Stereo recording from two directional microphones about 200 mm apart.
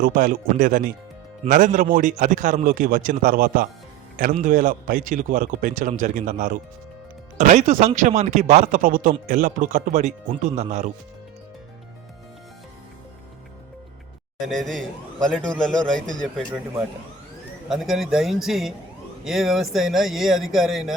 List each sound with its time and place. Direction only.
0.0 s a man's voice: 45° right (ahead or behind)
14.4 s speech: centre (ahead or behind)
17.7 s speech: centre (ahead or behind)